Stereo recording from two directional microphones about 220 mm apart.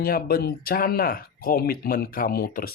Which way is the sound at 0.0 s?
40° left (ahead or behind).